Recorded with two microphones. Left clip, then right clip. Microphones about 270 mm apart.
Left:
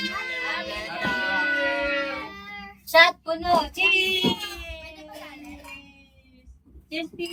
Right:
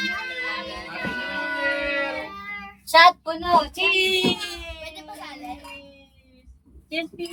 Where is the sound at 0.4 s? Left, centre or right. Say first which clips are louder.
Even; centre.